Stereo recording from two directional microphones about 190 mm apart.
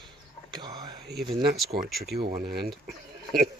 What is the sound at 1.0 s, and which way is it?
Speech, 60° right (ahead or behind).